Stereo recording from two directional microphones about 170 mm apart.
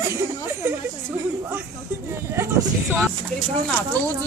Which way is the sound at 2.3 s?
15° right (ahead or behind).